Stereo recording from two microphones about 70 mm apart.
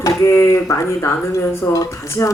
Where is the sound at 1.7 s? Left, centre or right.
Left.